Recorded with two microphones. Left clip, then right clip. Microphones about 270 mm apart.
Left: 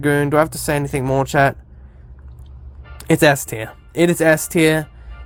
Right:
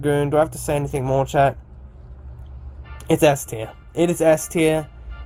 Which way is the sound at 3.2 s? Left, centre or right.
Left.